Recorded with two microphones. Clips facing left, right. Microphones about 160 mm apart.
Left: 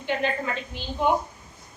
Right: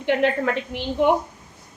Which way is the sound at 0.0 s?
65° right (ahead or behind).